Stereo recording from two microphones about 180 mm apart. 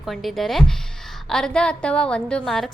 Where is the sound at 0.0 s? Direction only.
Centre (ahead or behind).